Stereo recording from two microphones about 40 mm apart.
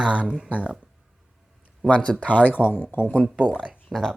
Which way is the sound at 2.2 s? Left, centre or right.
Left.